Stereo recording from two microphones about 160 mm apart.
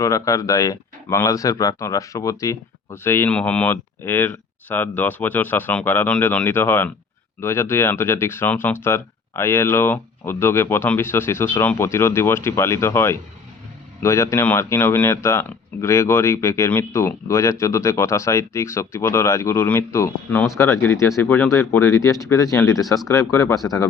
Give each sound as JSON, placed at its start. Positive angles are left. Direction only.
{"t": 0.0, "sound": "speech", "side_deg": 20}